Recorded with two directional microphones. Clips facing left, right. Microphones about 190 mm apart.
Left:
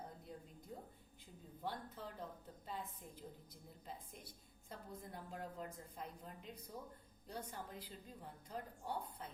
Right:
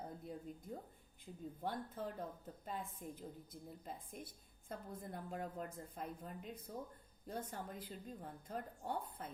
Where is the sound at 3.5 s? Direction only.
50° right (ahead or behind).